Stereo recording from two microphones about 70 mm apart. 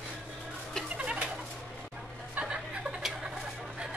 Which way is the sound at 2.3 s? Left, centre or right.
Centre.